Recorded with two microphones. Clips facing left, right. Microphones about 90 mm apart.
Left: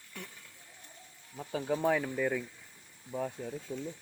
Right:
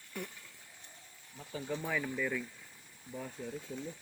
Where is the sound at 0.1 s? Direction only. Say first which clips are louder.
Right 4 dB; 5° right (ahead or behind).